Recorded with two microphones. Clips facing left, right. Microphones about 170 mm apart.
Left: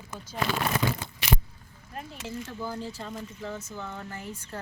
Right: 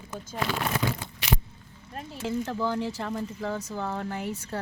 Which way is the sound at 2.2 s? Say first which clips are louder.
Right 8 dB; 90° right.